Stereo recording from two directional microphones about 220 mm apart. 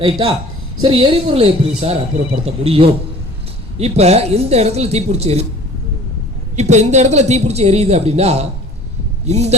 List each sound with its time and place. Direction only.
0.0 s speech: 25° right (ahead or behind)
6.6 s speech: 30° right (ahead or behind)